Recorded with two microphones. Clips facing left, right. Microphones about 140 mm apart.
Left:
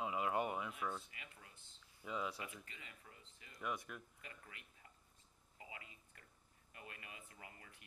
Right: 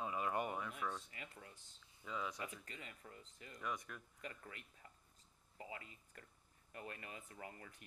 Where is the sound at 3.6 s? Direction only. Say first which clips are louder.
Left 1 dB; 5° left (ahead or behind).